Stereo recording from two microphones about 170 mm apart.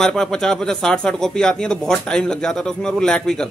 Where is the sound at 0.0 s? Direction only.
5° left (ahead or behind).